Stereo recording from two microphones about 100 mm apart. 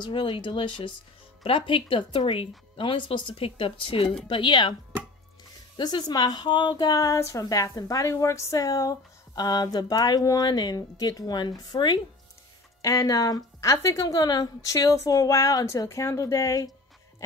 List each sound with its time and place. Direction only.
0.0 s speech: 55° left (ahead or behind)
5.8 s speech: 45° left (ahead or behind)
7.0 s a woman's voice: 30° left (ahead or behind)
12.8 s a woman's voice: 35° left (ahead or behind)